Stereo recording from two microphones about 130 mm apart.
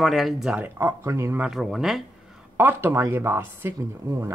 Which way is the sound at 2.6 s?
15° right (ahead or behind).